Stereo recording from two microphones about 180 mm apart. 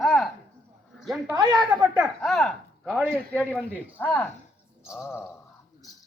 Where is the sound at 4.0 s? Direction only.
10° left (ahead or behind).